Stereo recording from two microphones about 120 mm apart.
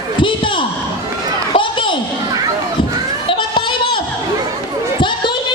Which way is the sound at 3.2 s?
45° left (ahead or behind).